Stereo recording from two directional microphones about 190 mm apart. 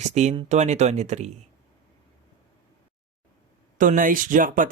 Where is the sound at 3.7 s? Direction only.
45° right (ahead or behind).